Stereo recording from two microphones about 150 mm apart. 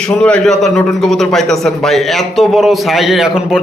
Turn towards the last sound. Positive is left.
turn(degrees=-5)  # may be behind; listen again after turning